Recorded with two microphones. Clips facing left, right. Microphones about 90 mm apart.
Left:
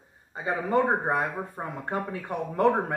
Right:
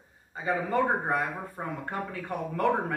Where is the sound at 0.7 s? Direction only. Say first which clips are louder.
Left 4 dB; 20° left (ahead or behind).